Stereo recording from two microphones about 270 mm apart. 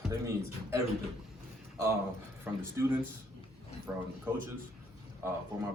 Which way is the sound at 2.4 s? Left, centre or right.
Centre.